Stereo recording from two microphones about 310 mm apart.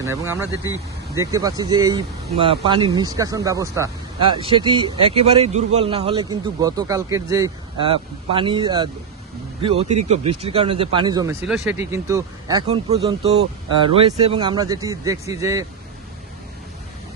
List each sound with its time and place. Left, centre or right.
0.0 s a man's voice: centre
11.4 s a man's voice: centre